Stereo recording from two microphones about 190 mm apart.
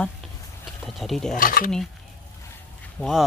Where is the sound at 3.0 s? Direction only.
Centre (ahead or behind).